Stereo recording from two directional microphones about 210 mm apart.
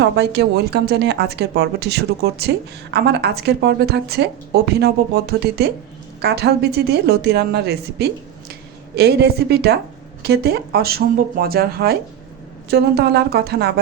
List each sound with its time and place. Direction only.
0.0 s speech: 55° right (ahead or behind)